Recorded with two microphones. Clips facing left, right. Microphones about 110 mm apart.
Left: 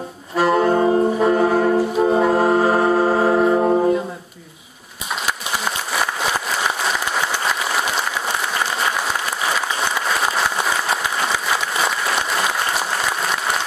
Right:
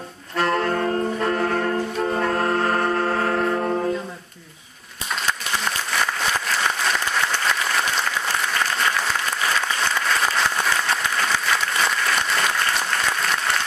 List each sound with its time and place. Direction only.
0.4 s saxophone: 5° left (ahead or behind)
3.3 s music: 10° left (ahead or behind)
3.6 s a sound: 20° left (ahead or behind)
5.9 s applause: 10° left (ahead or behind)
9.0 s applause: 10° left (ahead or behind)